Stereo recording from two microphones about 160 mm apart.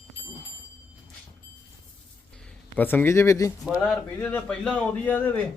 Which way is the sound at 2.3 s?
10° left (ahead or behind).